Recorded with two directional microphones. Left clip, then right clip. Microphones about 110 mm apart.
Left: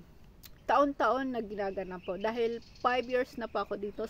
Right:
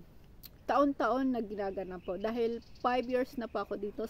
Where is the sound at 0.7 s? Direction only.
10° right (ahead or behind).